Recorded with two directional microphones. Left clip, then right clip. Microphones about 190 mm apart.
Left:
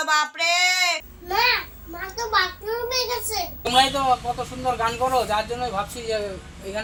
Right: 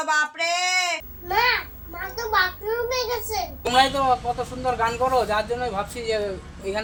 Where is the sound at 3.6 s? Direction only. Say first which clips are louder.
Even; 5° right (ahead or behind).